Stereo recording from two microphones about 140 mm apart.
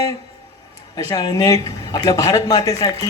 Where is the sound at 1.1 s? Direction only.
30° left (ahead or behind).